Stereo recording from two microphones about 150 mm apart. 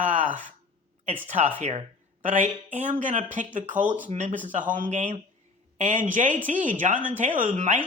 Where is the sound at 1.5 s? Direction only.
45° right (ahead or behind).